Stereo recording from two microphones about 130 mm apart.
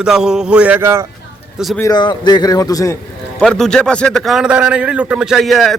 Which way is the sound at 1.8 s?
35° left (ahead or behind).